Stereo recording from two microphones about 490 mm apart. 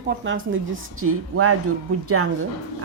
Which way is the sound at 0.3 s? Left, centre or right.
Right.